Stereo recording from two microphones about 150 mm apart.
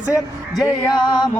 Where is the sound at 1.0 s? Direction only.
30° left (ahead or behind).